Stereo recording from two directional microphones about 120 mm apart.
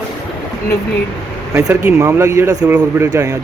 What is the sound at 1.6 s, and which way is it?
Speech, 25° right (ahead or behind).